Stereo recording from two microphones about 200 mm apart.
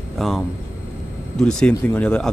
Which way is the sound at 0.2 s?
Centre (ahead or behind).